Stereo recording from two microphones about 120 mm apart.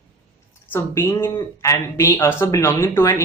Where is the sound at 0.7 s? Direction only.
20° left (ahead or behind).